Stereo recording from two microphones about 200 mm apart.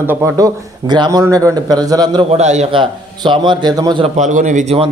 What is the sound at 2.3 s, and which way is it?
A man's voice, 35° right (ahead or behind).